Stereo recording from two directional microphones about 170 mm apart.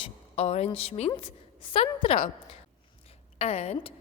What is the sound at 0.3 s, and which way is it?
A woman's voice, 40° left (ahead or behind).